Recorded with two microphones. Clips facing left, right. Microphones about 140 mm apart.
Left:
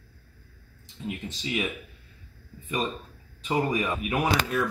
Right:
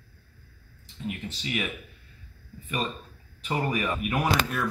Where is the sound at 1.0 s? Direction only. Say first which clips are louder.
Left 1 dB; 20° left (ahead or behind).